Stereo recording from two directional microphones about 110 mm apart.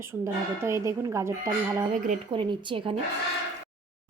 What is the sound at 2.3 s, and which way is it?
Speech, 45° right (ahead or behind).